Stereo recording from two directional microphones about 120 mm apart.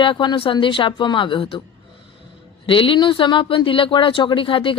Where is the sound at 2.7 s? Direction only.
45° left (ahead or behind).